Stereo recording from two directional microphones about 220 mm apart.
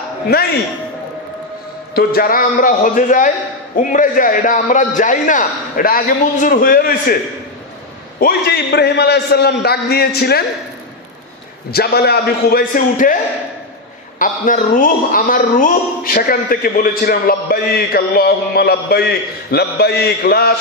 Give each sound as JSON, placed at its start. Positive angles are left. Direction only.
{"t": 0.3, "sound": "a man's voice", "side_deg": 45}
{"t": 2.0, "sound": "a man's voice", "side_deg": 40}
{"t": 8.2, "sound": "a man's voice", "side_deg": 45}
{"t": 11.7, "sound": "a man's voice", "side_deg": 45}